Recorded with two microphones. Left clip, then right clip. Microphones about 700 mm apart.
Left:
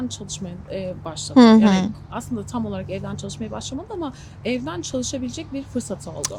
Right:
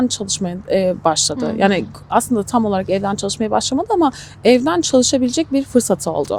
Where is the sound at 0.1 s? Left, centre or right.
Right.